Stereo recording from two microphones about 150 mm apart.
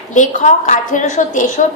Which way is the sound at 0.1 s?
55° left (ahead or behind).